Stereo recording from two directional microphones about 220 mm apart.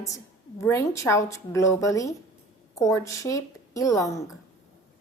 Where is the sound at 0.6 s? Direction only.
15° left (ahead or behind).